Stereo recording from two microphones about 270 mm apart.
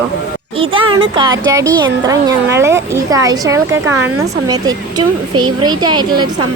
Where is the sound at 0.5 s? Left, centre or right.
Centre.